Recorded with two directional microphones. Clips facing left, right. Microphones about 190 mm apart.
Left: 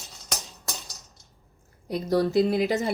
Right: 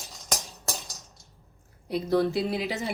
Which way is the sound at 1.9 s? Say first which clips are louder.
Left 2 dB; 45° left (ahead or behind).